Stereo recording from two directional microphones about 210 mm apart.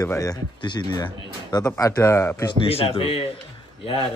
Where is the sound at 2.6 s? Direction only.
25° left (ahead or behind).